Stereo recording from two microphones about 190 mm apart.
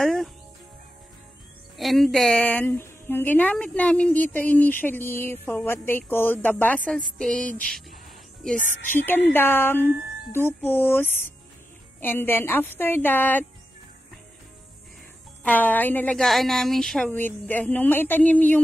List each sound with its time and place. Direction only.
0.0 s music: centre (ahead or behind)
1.8 s a woman's voice: centre (ahead or behind)
8.5 s a woman's voice: 45° left (ahead or behind)
9.3 s a woman's voice: 10° left (ahead or behind)
15.4 s a woman's voice: 10° left (ahead or behind)